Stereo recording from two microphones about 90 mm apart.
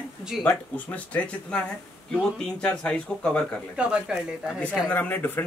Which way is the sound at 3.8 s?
10° right (ahead or behind).